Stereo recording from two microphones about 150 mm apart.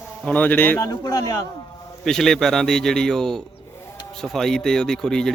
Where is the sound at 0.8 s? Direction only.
25° left (ahead or behind).